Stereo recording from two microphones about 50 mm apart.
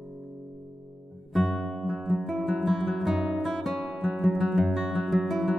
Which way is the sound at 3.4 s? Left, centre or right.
Centre.